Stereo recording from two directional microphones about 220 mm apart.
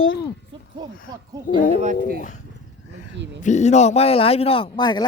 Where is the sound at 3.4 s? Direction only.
30° left (ahead or behind).